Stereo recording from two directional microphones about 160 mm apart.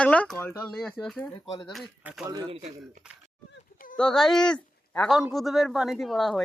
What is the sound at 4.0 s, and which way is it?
A man's voice, 5° left (ahead or behind).